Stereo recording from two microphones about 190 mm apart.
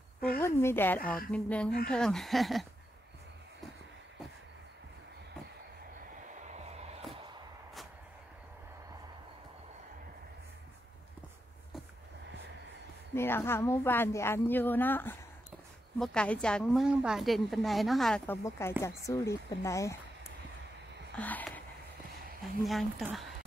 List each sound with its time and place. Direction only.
0.4 s a woman's voice: 15° left (ahead or behind)
1.0 s speech: 50° left (ahead or behind)
1.3 s a woman's voice: 5° left (ahead or behind)
13.1 s a woman's voice: 10° left (ahead or behind)
21.1 s a sound: 10° left (ahead or behind)
22.7 s a woman's voice: centre (ahead or behind)